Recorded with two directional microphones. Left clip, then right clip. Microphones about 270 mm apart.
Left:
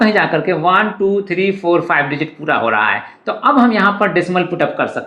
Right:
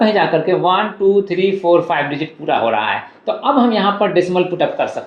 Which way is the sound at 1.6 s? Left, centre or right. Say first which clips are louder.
Right 2 dB; left.